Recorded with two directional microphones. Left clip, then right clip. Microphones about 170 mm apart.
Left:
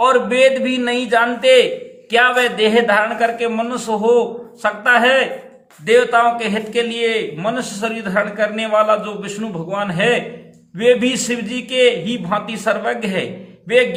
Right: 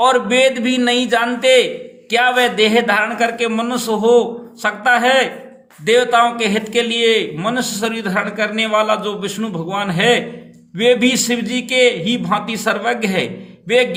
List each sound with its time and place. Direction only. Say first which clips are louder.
0.0 s a man's voice: even; 25° right (ahead or behind)